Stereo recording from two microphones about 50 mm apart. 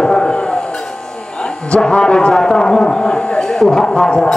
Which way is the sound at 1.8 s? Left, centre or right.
Centre.